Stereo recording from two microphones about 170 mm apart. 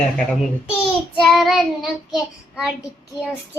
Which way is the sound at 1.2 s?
Centre (ahead or behind).